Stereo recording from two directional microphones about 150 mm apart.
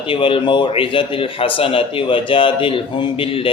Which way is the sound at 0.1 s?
35° left (ahead or behind).